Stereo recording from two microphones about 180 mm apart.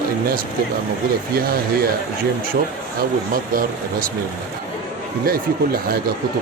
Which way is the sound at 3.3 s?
50° right (ahead or behind).